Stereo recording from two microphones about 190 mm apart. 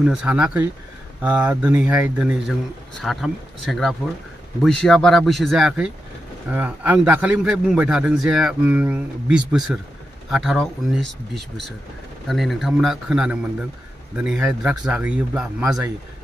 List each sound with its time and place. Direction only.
0.0 s a man's voice: 5° right (ahead or behind)
12.3 s a man's voice: centre (ahead or behind)